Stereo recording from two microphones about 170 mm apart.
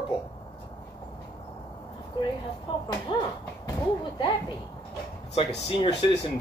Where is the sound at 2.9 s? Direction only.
25° left (ahead or behind).